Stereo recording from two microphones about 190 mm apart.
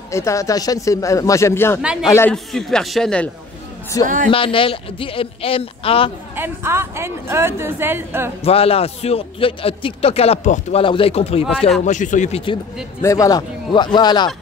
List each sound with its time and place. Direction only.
0.1 s speech: 15° left (ahead or behind)
1.8 s a man's voice: 5° right (ahead or behind)
2.0 s speech: 15° left (ahead or behind)
2.3 s a man's voice: centre (ahead or behind)
3.9 s speech: 20° left (ahead or behind)
6.3 s a woman's voice: 10° right (ahead or behind)
8.5 s a man's voice: 30° left (ahead or behind)
13.0 s speech: 15° left (ahead or behind)